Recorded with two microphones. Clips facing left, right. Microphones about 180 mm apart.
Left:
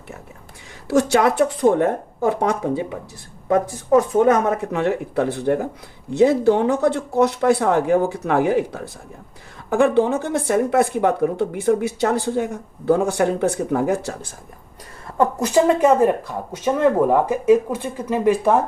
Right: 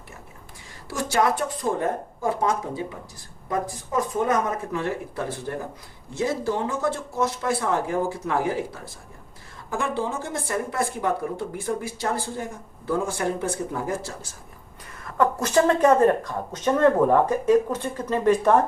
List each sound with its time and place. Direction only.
0.9 s speech: 70° left (ahead or behind)
4.2 s speech: 70° left (ahead or behind)
15.4 s speech: 15° left (ahead or behind)